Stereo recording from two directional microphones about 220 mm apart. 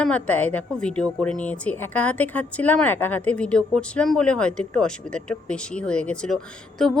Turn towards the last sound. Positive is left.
turn(degrees=0)  # may be behind; listen again after turning